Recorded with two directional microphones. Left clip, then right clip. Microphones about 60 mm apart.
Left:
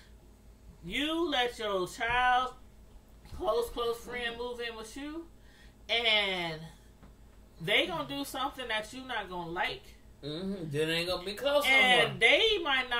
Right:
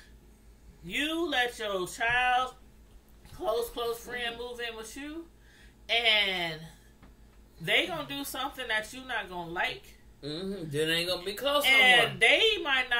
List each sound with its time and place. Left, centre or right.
1.0 s speech: centre
5.9 s speech: left
7.6 s speech: centre
10.2 s speech: right
11.6 s speech: left
12.2 s speech: centre